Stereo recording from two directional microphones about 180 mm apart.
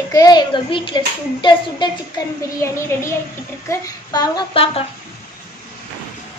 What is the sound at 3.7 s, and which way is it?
Child singing, 20° left (ahead or behind).